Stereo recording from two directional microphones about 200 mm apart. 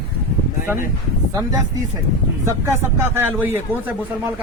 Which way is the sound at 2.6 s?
15° right (ahead or behind).